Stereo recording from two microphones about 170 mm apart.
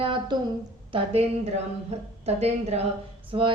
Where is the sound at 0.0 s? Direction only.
30° right (ahead or behind).